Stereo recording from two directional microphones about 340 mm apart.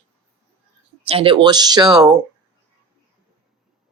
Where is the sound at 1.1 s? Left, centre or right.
Centre.